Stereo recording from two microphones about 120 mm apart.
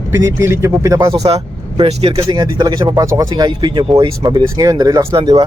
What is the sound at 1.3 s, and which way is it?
Speech, 55° right (ahead or behind).